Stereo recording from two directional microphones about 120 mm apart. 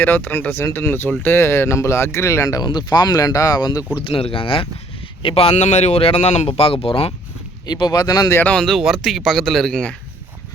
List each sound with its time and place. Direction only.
0.0 s speech: 15° left (ahead or behind)
2.6 s speech: 35° left (ahead or behind)
4.0 s speech: 50° left (ahead or behind)
7.7 s speech: 35° left (ahead or behind)
8.4 s speech: 10° left (ahead or behind)